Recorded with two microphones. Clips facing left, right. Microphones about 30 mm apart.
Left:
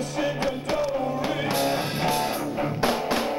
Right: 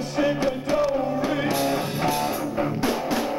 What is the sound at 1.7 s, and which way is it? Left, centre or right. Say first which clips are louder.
Music: right 1 dB; left.